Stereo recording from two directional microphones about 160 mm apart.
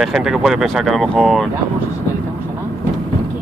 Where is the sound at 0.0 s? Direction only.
Centre (ahead or behind).